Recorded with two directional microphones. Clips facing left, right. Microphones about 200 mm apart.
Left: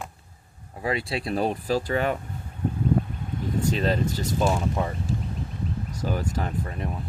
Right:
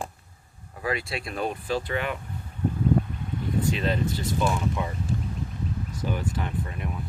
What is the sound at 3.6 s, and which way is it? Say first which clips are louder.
Speech: left 2 dB; 40° left (ahead or behind).